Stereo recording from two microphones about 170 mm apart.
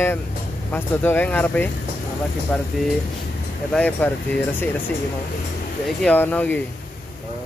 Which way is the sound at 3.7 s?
5° left (ahead or behind).